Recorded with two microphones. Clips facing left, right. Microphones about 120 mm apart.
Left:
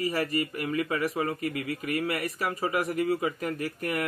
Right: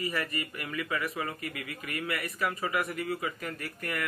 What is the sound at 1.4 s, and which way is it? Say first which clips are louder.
Speech: left 8 dB; 5° left (ahead or behind).